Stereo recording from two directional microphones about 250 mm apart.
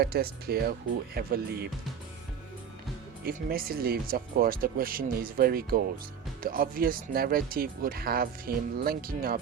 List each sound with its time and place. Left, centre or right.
0.0 s speech: right
3.2 s speech: right